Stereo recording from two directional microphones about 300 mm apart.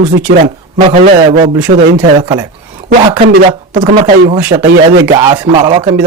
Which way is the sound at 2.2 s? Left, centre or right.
Centre.